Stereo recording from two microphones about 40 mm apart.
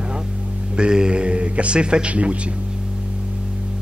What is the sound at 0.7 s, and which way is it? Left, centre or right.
A man's voice, right.